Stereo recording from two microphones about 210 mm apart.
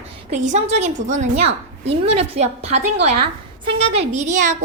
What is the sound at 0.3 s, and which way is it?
A woman's voice, 35° right (ahead or behind).